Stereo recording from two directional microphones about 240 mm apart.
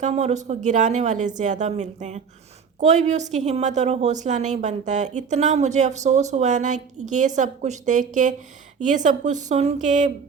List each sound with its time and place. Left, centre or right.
0.0 s a woman's voice: right